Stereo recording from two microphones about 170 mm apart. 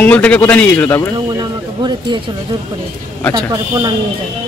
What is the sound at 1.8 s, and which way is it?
Speech, 25° right (ahead or behind).